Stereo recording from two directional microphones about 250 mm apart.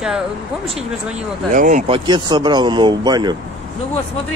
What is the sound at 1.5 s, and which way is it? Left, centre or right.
Speech, right.